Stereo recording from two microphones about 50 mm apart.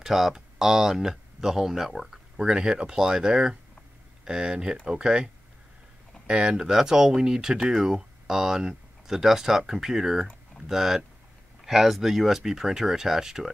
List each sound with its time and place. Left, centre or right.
0.0 s speech: centre
2.3 s speech: centre